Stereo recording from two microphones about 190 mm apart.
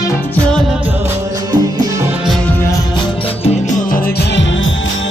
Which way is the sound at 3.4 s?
40° left (ahead or behind).